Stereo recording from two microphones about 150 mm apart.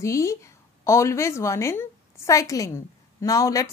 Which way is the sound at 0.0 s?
20° left (ahead or behind).